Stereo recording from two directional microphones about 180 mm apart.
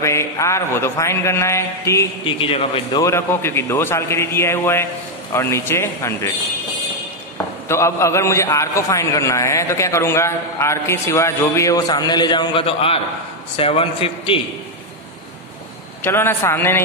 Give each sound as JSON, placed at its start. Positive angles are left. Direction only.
{"t": 0.0, "sound": "a man's voice", "side_deg": 15}
{"t": 2.2, "sound": "a man's voice", "side_deg": 30}
{"t": 7.6, "sound": "a man's voice", "side_deg": 15}
{"t": 16.0, "sound": "a man's voice", "side_deg": 15}